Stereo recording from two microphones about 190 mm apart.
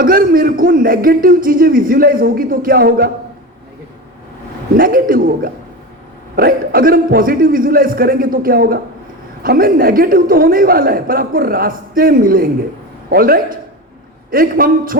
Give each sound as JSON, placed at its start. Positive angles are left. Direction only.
{"t": 0.0, "sound": "a man's voice", "side_deg": -50}
{"t": 4.8, "sound": "a man's voice", "side_deg": -50}